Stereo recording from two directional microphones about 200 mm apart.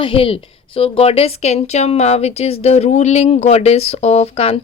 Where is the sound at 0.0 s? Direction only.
25° left (ahead or behind).